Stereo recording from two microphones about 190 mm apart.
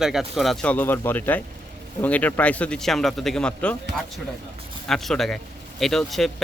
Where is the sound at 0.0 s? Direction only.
Centre (ahead or behind).